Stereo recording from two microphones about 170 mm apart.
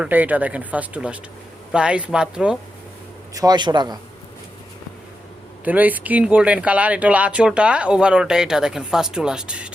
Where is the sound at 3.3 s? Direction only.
25° right (ahead or behind).